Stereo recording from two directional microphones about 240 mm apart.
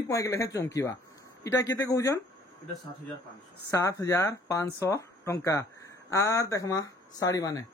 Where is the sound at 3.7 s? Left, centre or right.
Centre.